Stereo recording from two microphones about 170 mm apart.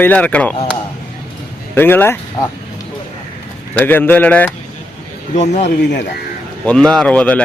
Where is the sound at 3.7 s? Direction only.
10° left (ahead or behind).